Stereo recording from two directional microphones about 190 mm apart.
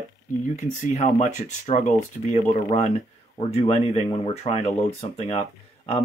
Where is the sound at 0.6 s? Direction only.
35° left (ahead or behind).